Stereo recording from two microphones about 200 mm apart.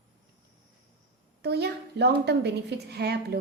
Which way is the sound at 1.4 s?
55° right (ahead or behind).